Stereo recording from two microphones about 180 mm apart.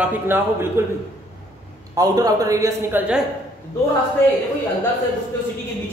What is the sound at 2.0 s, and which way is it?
Speech, 20° right (ahead or behind).